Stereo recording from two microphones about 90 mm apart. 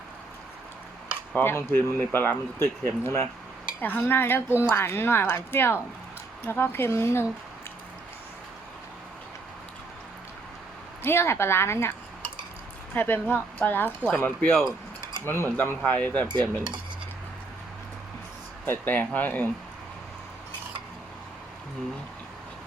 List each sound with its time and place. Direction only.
1.3 s speech: 25° left (ahead or behind)
11.0 s speech: 25° left (ahead or behind)
16.3 s cutlery: 55° right (ahead or behind)
18.6 s speech: 20° left (ahead or behind)